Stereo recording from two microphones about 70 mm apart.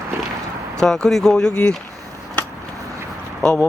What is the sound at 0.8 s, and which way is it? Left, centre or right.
Speech, centre.